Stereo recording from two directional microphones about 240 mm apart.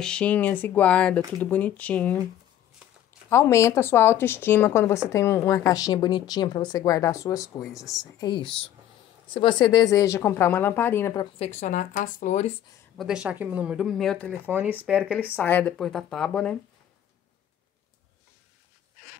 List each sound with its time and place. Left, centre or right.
0.0 s speech: centre
3.3 s speech: centre
11.3 s speech: left
12.9 s speech: centre
14.5 s speech: centre
15.3 s speech: centre